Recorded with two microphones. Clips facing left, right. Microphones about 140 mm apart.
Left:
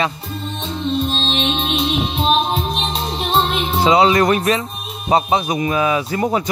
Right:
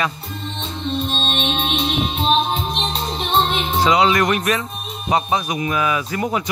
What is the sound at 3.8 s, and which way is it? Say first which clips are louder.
Speech: left 3 dB; 30° left (ahead or behind).